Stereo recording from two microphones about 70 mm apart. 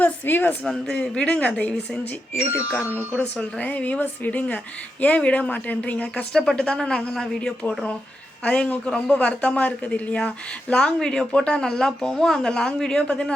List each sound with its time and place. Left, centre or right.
0.0 s speech: left
0.6 s speech: centre
3.6 s speech: left